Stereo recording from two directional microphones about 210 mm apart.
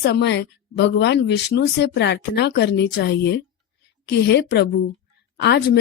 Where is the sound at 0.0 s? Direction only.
55° left (ahead or behind).